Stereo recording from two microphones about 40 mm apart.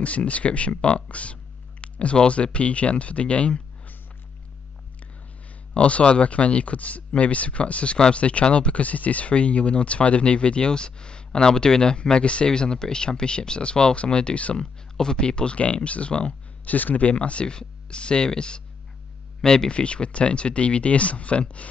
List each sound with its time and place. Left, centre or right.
0.0 s speech: left
1.0 s a sound: left
2.1 s speech: left
5.8 s speech: left
16.6 s speech: left